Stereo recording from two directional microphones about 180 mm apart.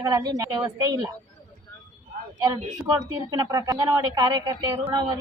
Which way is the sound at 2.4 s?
20° right (ahead or behind).